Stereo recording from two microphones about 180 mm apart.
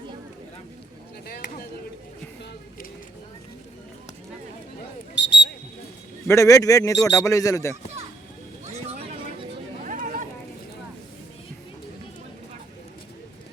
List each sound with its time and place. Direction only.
5.1 s a sound: 75° left (ahead or behind)
6.2 s speech: 15° left (ahead or behind)
9.8 s chatter: 50° right (ahead or behind)